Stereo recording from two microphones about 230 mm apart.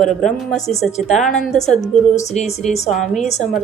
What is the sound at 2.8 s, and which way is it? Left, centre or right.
Speech, centre.